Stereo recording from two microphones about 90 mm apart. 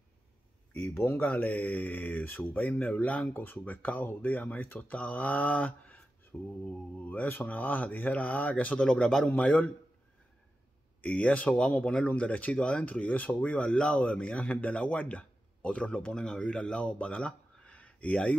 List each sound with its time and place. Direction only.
0.7 s speech: 15° left (ahead or behind)
11.0 s speech: 15° left (ahead or behind)